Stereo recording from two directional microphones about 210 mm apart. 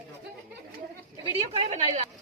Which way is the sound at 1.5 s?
30° right (ahead or behind).